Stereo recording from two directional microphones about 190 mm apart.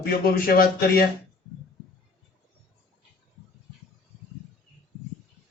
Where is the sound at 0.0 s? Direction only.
50° left (ahead or behind).